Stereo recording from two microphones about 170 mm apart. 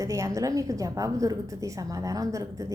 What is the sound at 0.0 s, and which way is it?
A woman's voice, 20° right (ahead or behind).